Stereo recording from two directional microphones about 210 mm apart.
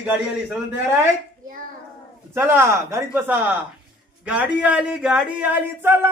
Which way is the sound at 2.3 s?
10° right (ahead or behind).